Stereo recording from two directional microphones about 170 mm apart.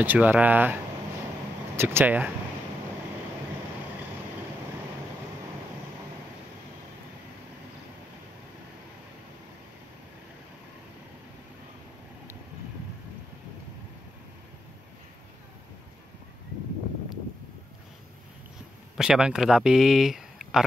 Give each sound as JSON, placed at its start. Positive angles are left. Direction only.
{"t": 0.0, "sound": "speech", "side_deg": -10}
{"t": 1.8, "sound": "speech", "side_deg": -15}
{"t": 18.9, "sound": "speech", "side_deg": -5}